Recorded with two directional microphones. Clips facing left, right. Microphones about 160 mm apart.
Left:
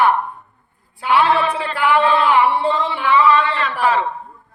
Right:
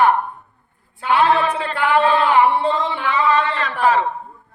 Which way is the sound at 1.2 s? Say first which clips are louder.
Even; 40° right (ahead or behind).